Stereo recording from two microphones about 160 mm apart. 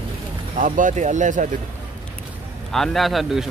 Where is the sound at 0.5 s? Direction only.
55° right (ahead or behind).